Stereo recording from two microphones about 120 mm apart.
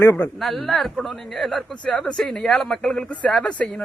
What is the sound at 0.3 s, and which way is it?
A man's voice, centre (ahead or behind).